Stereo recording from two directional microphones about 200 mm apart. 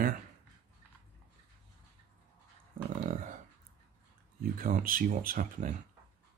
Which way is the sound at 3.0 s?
45° right (ahead or behind).